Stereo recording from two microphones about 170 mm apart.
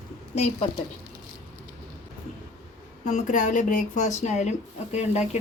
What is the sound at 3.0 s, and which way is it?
Speech, 50° left (ahead or behind).